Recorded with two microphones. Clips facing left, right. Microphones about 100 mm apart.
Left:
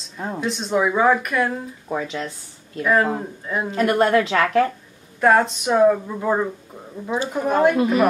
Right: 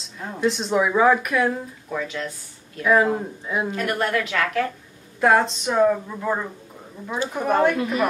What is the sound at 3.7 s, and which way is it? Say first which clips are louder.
A woman's voice: left 9 dB; 30° left (ahead or behind).